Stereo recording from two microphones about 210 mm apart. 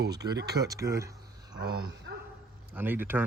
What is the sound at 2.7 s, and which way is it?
Speech, 10° right (ahead or behind).